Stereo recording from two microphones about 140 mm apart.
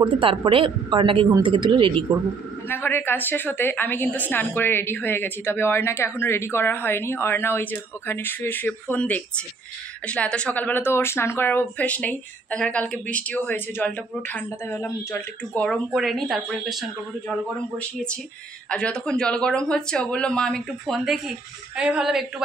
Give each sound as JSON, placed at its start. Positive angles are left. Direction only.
{"t": 0.0, "sound": "a woman's voice", "side_deg": -35}
{"t": 2.7, "sound": "speech", "side_deg": 15}
{"t": 18.7, "sound": "speech", "side_deg": 5}